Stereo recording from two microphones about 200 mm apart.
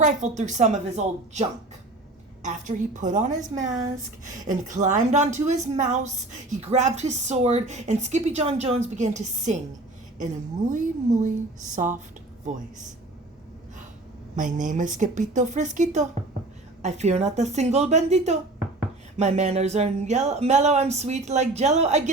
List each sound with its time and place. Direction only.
0.0 s a woman's voice: 35° right (ahead or behind)
3.5 s a woman's voice: 15° right (ahead or behind)
4.3 s a woman's voice: 40° right (ahead or behind)
10.7 s a woman's voice: 40° right (ahead or behind)
14.3 s a woman's voice: 40° right (ahead or behind)